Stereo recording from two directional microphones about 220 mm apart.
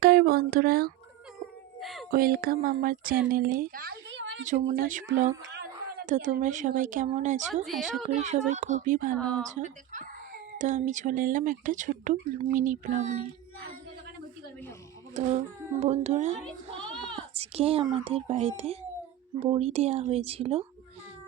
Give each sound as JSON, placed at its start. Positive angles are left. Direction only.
{"t": 0.0, "sound": "speech", "side_deg": -45}
{"t": 1.8, "sound": "a sound", "side_deg": 0}
{"t": 2.0, "sound": "speech", "side_deg": -40}
{"t": 4.7, "sound": "speech", "side_deg": -35}
{"t": 7.6, "sound": "a woman's voice", "side_deg": 0}
{"t": 8.0, "sound": "speech", "side_deg": -30}
{"t": 9.1, "sound": "a woman's voice", "side_deg": 5}
{"t": 9.5, "sound": "speech", "side_deg": -35}
{"t": 15.1, "sound": "a child's voice", "side_deg": -30}